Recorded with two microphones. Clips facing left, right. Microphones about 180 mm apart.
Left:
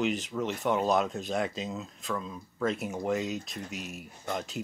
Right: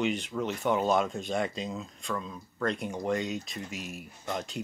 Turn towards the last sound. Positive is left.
turn(degrees=0)  # may be behind; listen again after turning